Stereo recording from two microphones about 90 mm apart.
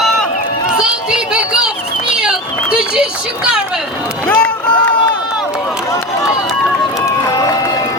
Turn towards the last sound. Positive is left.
turn(degrees=40)  # may be behind; listen again after turning